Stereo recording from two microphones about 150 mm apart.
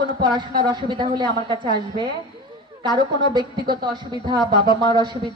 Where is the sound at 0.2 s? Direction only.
30° right (ahead or behind).